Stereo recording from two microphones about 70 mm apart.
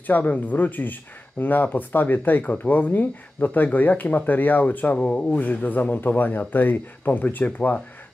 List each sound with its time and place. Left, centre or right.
0.0 s speech: left